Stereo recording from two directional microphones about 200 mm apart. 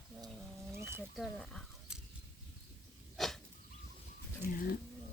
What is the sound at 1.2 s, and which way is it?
Speech, centre (ahead or behind).